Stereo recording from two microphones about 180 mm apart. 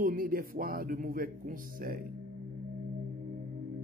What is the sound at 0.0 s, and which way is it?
Speech, 55° right (ahead or behind).